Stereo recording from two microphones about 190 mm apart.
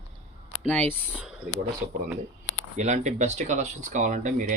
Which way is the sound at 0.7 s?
10° left (ahead or behind).